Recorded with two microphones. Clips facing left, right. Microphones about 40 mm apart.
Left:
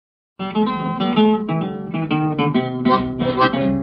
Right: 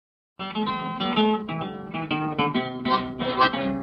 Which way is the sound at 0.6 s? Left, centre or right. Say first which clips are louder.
Left 7 dB; left.